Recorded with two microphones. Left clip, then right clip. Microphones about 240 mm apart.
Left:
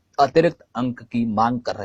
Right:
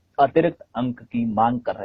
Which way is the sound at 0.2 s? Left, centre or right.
Left.